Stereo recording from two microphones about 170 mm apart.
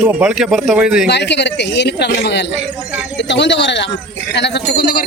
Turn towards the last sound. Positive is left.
turn(degrees=70)  # may be behind; listen again after turning